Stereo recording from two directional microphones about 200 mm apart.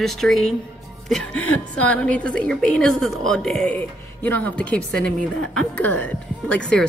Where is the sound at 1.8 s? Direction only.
5° left (ahead or behind).